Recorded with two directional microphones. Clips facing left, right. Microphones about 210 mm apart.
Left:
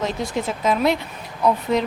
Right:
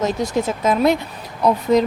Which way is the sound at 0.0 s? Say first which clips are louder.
Right 4 dB; 45° right (ahead or behind).